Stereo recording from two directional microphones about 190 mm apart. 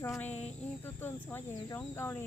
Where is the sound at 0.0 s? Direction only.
10° left (ahead or behind).